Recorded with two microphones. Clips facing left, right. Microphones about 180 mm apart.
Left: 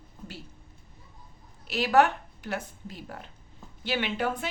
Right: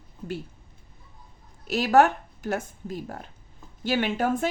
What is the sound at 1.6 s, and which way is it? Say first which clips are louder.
Speech: right 3 dB; 45° right (ahead or behind).